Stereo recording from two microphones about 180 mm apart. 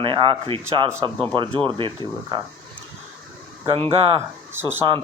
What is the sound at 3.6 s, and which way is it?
Speech, 30° right (ahead or behind).